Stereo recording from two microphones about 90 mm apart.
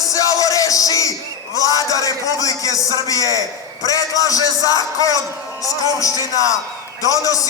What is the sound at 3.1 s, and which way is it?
Speech, 40° left (ahead or behind).